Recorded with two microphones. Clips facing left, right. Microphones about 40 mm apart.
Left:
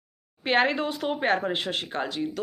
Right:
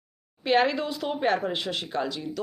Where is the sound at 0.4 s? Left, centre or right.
Left.